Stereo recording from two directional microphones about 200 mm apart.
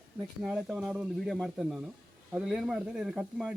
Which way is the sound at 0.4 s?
Centre (ahead or behind).